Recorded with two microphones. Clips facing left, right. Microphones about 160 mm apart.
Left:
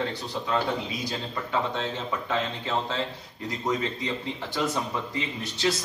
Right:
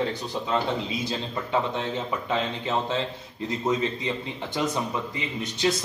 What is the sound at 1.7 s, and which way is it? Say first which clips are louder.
A man's voice: right 2 dB; 20° right (ahead or behind).